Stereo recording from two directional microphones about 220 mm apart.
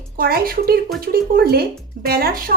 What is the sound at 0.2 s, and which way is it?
A woman's voice, 45° right (ahead or behind).